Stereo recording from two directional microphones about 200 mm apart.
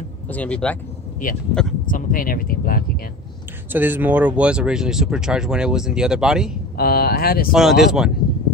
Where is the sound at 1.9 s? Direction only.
45° left (ahead or behind).